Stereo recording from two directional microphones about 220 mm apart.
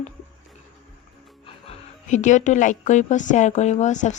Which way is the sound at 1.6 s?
35° left (ahead or behind).